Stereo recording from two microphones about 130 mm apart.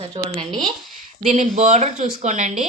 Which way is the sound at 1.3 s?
60° right (ahead or behind).